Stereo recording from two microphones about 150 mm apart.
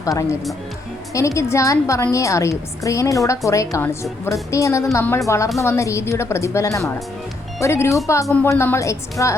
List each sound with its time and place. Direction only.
0.0 s a woman's voice: 20° left (ahead or behind)